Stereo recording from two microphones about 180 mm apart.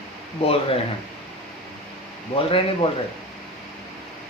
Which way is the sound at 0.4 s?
30° left (ahead or behind).